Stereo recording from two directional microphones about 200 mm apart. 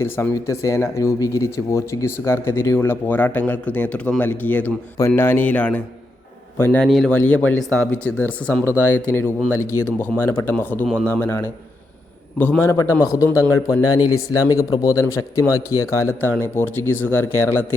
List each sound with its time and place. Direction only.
0.0 s speech: 15° left (ahead or behind)